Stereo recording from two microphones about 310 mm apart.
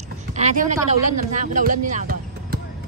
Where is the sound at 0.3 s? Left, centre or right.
Right.